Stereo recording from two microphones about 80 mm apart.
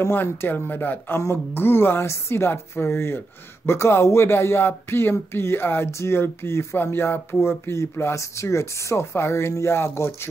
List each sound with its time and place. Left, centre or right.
0.1 s speech: left